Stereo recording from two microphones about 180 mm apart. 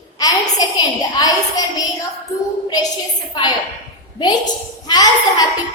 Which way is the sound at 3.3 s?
25° left (ahead or behind).